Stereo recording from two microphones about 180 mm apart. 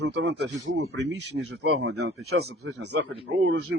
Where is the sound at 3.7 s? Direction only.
90° right.